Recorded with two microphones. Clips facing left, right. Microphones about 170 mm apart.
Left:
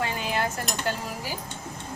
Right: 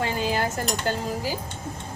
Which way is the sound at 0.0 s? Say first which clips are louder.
Right 3 dB; 30° right (ahead or behind).